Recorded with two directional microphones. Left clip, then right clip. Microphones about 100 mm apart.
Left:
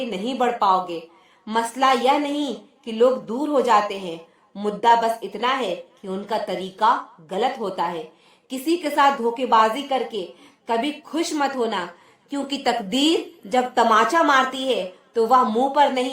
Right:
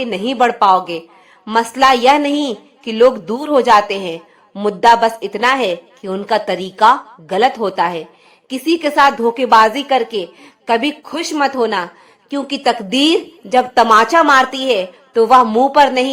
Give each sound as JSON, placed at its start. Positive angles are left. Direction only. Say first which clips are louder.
{"t": 0.1, "sound": "a woman's voice", "louder": "right 9 dB", "side_deg": -45}
{"t": 8.4, "sound": "a woman's voice", "louder": "right 7 dB", "side_deg": -25}
{"t": 12.3, "sound": "a woman's voice", "louder": "right 7 dB", "side_deg": -20}
{"t": 13.9, "sound": "a woman's voice", "louder": "right 8 dB", "side_deg": -35}